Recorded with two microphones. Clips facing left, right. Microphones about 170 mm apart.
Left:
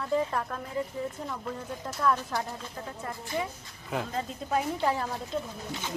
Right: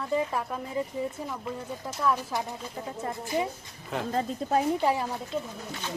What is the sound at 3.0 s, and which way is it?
Speech, 20° right (ahead or behind).